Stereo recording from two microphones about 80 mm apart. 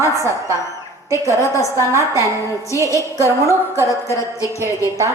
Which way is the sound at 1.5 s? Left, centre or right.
Left.